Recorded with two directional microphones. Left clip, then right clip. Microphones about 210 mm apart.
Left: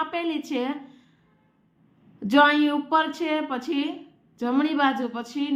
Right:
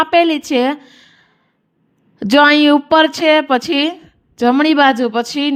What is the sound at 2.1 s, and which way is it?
A woman's voice, 40° right (ahead or behind).